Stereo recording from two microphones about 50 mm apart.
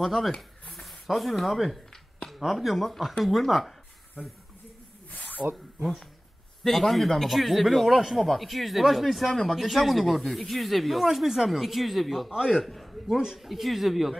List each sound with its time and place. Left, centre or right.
0.0 s speech: centre
5.1 s snake: left
6.6 s speech: centre